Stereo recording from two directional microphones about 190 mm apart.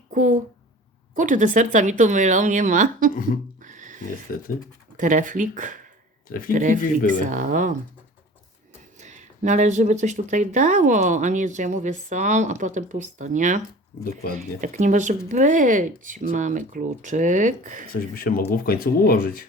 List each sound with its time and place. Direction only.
0.1 s speech: 40° right (ahead or behind)
3.6 s a sound: 40° right (ahead or behind)
4.9 s speech: 45° right (ahead or behind)
6.2 s speech: 45° left (ahead or behind)
6.5 s speech: 45° right (ahead or behind)
9.0 s speech: 40° right (ahead or behind)
17.9 s speech: 50° left (ahead or behind)